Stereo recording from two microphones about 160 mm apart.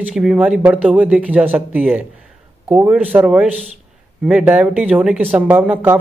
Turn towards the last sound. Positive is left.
turn(degrees=-10)  # may be behind; listen again after turning